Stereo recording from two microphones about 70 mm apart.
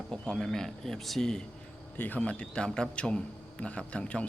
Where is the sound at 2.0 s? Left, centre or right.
Left.